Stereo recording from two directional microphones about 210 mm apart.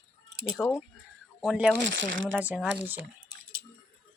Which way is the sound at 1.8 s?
60° right (ahead or behind).